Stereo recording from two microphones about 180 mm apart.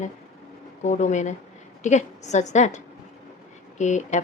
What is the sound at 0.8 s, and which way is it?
A woman's voice, 40° left (ahead or behind).